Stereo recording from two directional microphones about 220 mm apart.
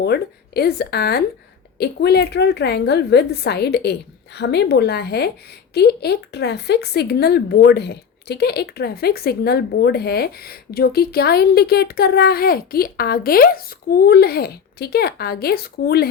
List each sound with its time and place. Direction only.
0.0 s speech: 45° left (ahead or behind)